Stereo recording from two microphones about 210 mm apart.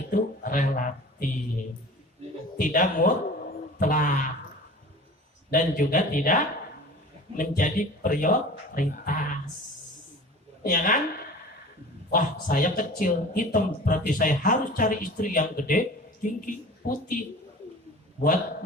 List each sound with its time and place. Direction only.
0.1 s speech: 40° left (ahead or behind)
2.6 s speech: 40° left (ahead or behind)
5.5 s speech: 40° left (ahead or behind)
10.6 s a woman's voice: 40° left (ahead or behind)
12.1 s speech: 40° left (ahead or behind)